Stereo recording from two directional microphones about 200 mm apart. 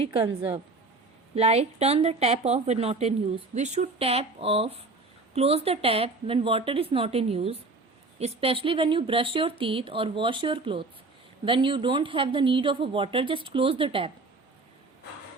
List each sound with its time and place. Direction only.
1.4 s a woman's voice: 30° right (ahead or behind)